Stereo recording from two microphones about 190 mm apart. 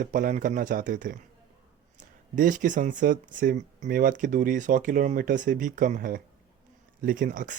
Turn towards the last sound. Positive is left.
turn(degrees=-45)  # may be behind; listen again after turning